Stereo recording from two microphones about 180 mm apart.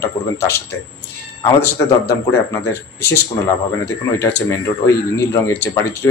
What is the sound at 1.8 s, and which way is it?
Speech, 15° left (ahead or behind).